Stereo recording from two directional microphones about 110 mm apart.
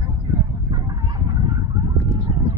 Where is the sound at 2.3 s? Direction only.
40° right (ahead or behind).